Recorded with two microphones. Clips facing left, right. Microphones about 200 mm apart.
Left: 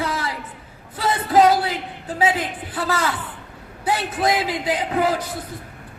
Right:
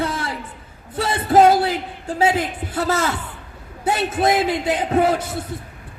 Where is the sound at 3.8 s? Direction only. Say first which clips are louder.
Right 3 dB; 25° right (ahead or behind).